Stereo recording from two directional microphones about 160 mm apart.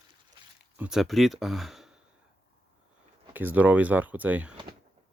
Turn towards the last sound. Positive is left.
turn(degrees=-10)  # may be behind; listen again after turning